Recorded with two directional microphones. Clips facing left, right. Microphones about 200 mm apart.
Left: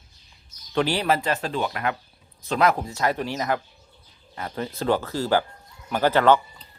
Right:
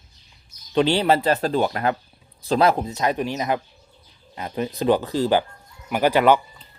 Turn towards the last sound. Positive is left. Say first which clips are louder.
# right 1 dB
turn(degrees=-15)  # may be behind; listen again after turning